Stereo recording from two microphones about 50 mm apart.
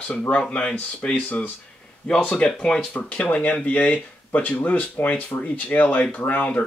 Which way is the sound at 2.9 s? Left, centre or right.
Left.